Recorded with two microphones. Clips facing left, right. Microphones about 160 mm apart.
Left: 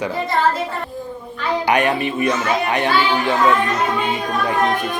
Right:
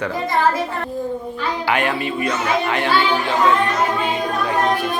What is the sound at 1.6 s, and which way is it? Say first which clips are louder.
Speech: left 3 dB; 20° left (ahead or behind).